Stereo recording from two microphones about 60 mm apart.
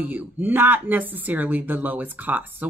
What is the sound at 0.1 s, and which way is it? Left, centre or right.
Speech, right.